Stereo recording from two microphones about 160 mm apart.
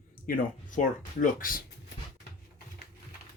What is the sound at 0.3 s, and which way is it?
Speech, 55° left (ahead or behind).